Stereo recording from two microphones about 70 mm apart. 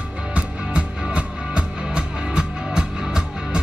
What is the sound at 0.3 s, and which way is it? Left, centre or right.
Music, centre.